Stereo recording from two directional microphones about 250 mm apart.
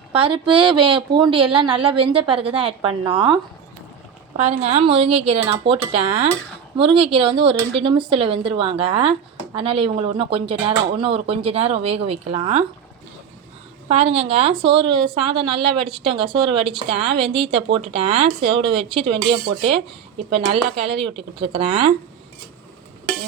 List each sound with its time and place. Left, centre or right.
0.1 s speech: right
4.4 s speech: right
13.8 s speech: right
20.3 s speech: right